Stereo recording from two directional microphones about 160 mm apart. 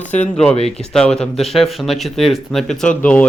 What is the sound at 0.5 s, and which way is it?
Speech, 40° left (ahead or behind).